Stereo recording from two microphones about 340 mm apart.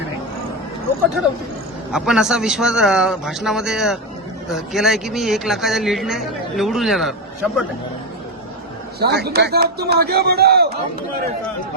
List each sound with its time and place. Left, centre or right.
1.9 s speech: centre
9.0 s a man's voice: right